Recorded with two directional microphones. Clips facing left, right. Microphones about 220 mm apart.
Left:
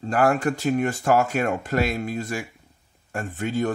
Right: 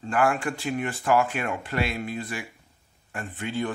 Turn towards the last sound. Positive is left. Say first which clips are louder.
# left 4 dB
turn(degrees=45)  # may be behind; listen again after turning